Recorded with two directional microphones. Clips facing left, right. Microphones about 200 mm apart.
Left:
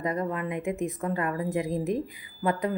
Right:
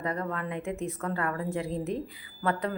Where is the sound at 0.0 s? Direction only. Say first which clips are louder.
Left 3 dB; 15° left (ahead or behind).